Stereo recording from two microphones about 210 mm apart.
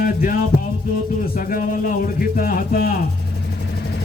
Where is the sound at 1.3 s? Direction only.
40° left (ahead or behind).